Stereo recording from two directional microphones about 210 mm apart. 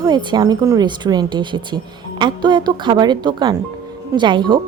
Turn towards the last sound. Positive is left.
turn(degrees=-20)  # may be behind; listen again after turning